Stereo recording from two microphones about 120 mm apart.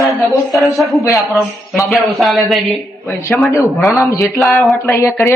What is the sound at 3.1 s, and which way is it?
Speech, 20° left (ahead or behind).